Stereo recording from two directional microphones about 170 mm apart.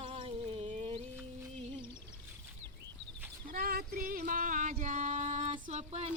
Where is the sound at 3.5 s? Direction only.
60° right (ahead or behind).